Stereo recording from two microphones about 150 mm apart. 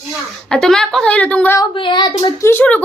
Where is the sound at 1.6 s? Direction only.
30° left (ahead or behind).